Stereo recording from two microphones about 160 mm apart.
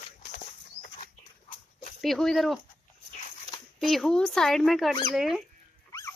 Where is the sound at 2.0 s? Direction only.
Centre (ahead or behind).